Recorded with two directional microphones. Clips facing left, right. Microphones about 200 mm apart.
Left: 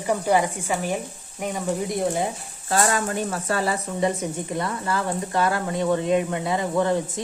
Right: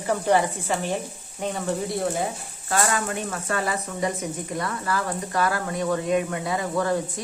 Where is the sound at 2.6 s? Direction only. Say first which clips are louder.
Left 2 dB; 30° left (ahead or behind).